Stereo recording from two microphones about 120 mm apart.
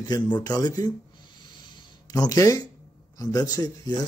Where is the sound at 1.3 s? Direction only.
40° left (ahead or behind).